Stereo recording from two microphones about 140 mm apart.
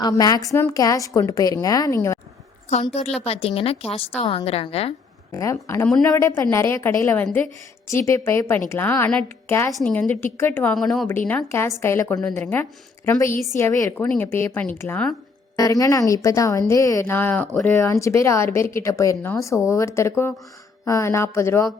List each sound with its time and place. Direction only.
0.0 s a woman's voice: 30° left (ahead or behind)
2.9 s a woman's voice: 45° left (ahead or behind)
5.3 s a woman's voice: 20° left (ahead or behind)
10.8 s a woman's voice: centre (ahead or behind)
11.3 s speech: 15° left (ahead or behind)
15.5 s a woman's voice: 25° left (ahead or behind); by 17.7 s 10° left (ahead or behind)
18.0 s a woman's voice: 20° left (ahead or behind)